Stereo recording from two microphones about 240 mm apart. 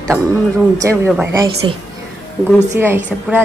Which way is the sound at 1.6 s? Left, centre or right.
Right.